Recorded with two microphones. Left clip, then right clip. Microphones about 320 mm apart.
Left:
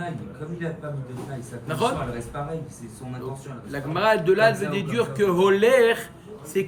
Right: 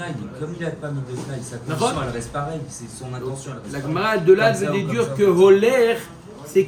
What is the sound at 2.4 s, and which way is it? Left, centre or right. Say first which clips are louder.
Speech: right 6 dB; centre.